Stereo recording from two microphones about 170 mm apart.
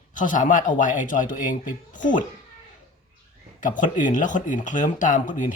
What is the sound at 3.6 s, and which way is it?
Speech, 50° left (ahead or behind).